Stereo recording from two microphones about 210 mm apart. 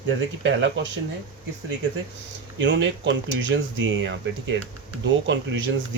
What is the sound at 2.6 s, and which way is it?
Speech, 60° right (ahead or behind).